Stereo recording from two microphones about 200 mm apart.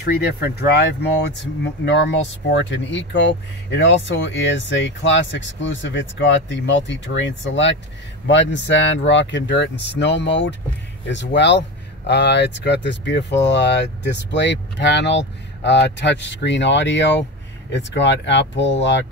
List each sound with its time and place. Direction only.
0.1 s speech: 55° left (ahead or behind)
2.5 s speech: 65° left (ahead or behind)